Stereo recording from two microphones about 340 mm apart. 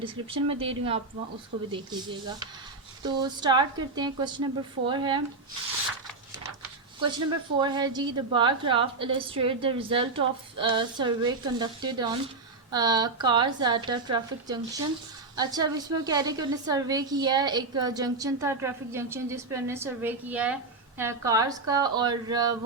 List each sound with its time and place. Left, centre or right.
0.0 s a woman's voice: centre
3.0 s a woman's voice: centre
7.0 s a woman's voice: centre